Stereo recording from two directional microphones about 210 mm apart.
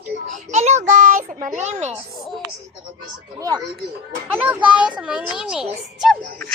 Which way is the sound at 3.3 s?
20° right (ahead or behind).